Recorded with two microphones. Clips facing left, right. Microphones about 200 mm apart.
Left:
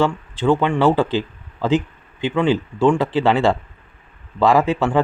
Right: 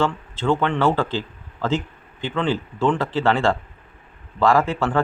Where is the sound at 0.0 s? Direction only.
15° left (ahead or behind).